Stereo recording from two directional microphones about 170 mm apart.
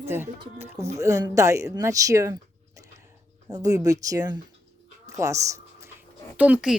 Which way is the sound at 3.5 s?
20° right (ahead or behind).